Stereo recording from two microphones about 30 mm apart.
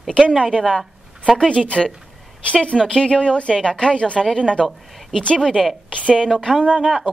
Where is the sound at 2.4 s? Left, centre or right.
Left.